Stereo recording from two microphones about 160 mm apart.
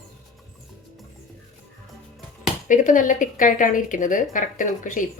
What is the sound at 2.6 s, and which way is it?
Speech, 55° left (ahead or behind).